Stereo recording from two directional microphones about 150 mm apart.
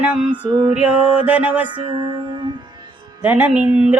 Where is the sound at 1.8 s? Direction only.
35° right (ahead or behind).